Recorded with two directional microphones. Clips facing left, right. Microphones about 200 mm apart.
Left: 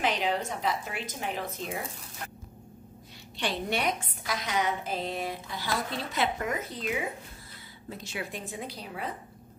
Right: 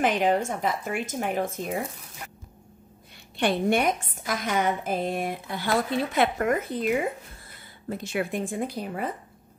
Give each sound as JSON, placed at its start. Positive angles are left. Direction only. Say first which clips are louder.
{"t": 0.0, "sound": "a woman's voice", "louder": "right 6 dB", "side_deg": -50}
{"t": 3.3, "sound": "a woman's voice", "louder": "right 8 dB", "side_deg": -55}
{"t": 7.9, "sound": "a woman's voice", "louder": "right 9 dB", "side_deg": -55}